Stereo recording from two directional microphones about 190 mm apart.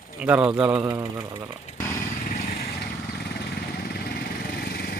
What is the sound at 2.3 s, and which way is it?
Vehicle, 45° left (ahead or behind).